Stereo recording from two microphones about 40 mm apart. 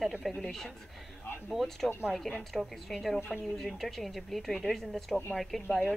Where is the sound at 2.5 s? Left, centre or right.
Centre.